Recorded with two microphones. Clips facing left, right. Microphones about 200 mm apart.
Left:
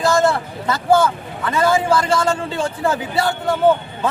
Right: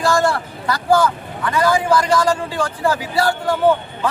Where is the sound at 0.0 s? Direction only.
20° left (ahead or behind).